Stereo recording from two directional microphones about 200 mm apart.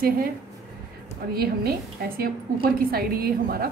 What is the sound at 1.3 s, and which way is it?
A woman's voice, 50° right (ahead or behind).